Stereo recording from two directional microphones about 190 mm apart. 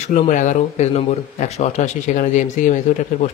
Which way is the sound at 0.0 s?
40° left (ahead or behind).